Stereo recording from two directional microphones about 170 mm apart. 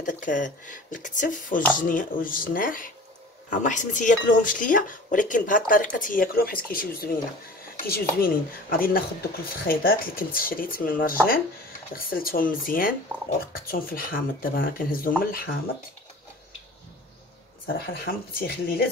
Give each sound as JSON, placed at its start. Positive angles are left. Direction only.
{"t": 0.0, "sound": "speech", "side_deg": 50}
{"t": 17.7, "sound": "speech", "side_deg": 65}